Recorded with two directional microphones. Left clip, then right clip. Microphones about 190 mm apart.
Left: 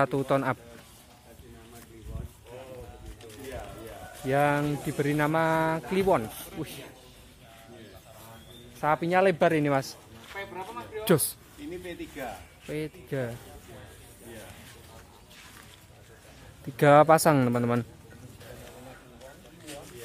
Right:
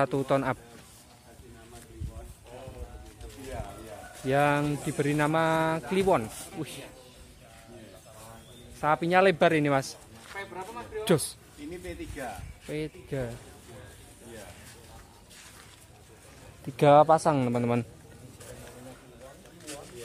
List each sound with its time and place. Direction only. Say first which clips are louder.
0.0 s speech: left 1 dB; centre (ahead or behind)
4.3 s speech: even; 10° right (ahead or behind)
8.7 s speech: right 1 dB; 5° right (ahead or behind)
11.8 s speech: even; 10° right (ahead or behind)
12.6 s speech: even; centre (ahead or behind)
16.7 s speech: even; centre (ahead or behind)
17.0 s speech: left 2 dB; 15° left (ahead or behind)
17.5 s speech: left 1 dB; centre (ahead or behind)